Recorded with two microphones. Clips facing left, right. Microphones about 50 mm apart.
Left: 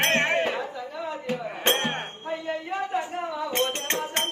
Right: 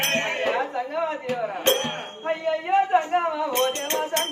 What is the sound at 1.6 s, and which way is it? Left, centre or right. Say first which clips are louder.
Music: right 1 dB; left.